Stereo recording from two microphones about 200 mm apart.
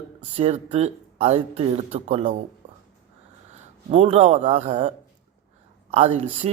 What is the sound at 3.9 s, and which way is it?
Speech, 30° right (ahead or behind).